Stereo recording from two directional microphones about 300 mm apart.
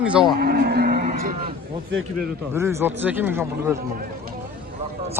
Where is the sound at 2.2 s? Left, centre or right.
Centre.